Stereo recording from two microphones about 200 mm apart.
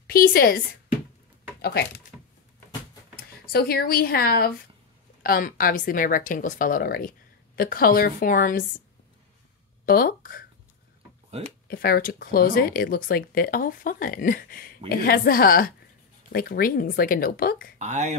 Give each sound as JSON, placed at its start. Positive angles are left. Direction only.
{"t": 0.0, "sound": "speech", "side_deg": 50}
{"t": 1.6, "sound": "speech", "side_deg": 55}
{"t": 3.5, "sound": "speech", "side_deg": 50}
{"t": 9.8, "sound": "speech", "side_deg": 45}
{"t": 11.6, "sound": "speech", "side_deg": 50}
{"t": 17.7, "sound": "speech", "side_deg": -35}